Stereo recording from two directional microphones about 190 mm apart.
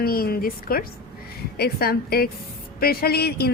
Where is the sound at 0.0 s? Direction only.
50° left (ahead or behind).